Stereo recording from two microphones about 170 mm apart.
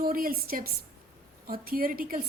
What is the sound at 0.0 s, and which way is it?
A woman's voice, 60° right (ahead or behind).